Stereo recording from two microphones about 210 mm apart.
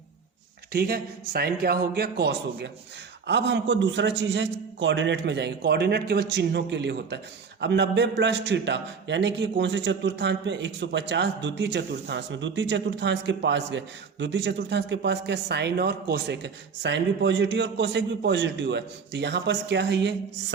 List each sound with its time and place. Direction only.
0.7 s a man's voice: 45° right (ahead or behind)